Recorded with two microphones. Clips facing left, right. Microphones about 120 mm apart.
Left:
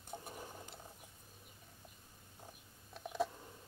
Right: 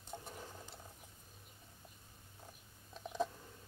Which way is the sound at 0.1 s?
15° left (ahead or behind).